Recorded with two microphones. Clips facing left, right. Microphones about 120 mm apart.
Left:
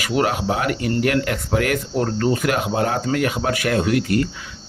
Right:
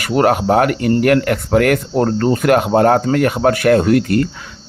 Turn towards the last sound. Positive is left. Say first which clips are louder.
# right 6 dB
turn(degrees=-50)  # may be behind; listen again after turning